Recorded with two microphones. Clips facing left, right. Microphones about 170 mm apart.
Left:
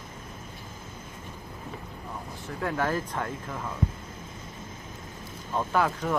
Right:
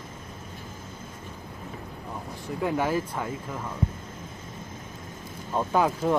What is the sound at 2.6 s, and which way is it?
Speech, 15° right (ahead or behind).